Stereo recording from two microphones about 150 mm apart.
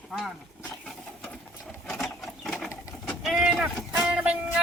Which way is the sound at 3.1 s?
Centre (ahead or behind).